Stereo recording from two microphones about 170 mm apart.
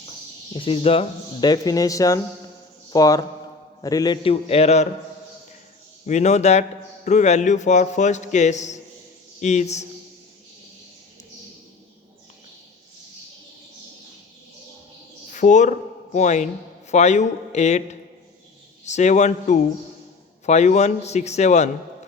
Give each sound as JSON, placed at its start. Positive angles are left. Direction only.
{"t": 0.5, "sound": "a man's voice", "side_deg": 35}
{"t": 6.1, "sound": "speech", "side_deg": 40}
{"t": 15.3, "sound": "a man's voice", "side_deg": 50}
{"t": 18.9, "sound": "a man's voice", "side_deg": 45}